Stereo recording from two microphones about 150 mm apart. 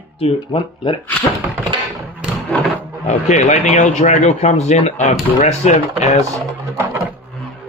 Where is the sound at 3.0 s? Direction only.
50° left (ahead or behind).